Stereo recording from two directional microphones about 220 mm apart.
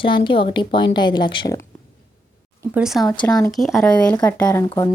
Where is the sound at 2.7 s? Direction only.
Centre (ahead or behind).